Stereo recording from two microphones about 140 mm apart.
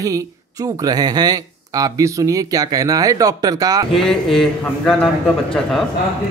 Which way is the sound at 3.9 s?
Centre (ahead or behind).